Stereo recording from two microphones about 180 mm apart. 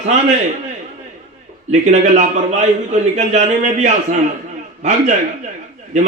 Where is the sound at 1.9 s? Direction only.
40° right (ahead or behind).